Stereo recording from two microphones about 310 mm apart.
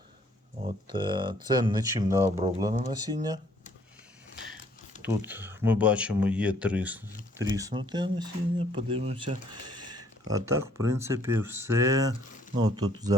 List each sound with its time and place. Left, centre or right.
0.6 s speech: centre
5.0 s speech: centre